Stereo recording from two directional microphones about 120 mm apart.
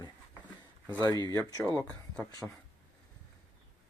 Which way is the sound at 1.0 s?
30° left (ahead or behind).